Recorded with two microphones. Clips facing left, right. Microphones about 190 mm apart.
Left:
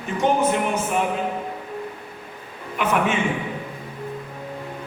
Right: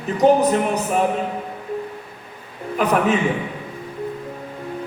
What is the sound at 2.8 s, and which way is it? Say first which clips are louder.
Speech: right 4 dB; 35° right (ahead or behind).